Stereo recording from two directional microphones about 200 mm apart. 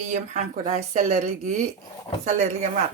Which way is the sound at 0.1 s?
35° right (ahead or behind).